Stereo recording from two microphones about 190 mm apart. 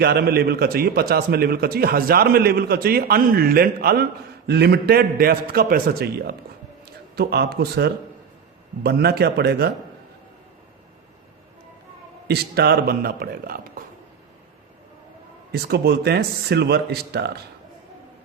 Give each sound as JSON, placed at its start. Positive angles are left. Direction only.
{"t": 0.0, "sound": "a man's voice", "side_deg": -55}
{"t": 12.3, "sound": "a man's voice", "side_deg": -55}
{"t": 15.5, "sound": "speech", "side_deg": -60}